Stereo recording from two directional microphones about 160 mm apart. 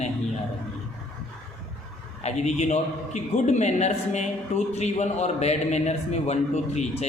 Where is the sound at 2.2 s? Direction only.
45° left (ahead or behind).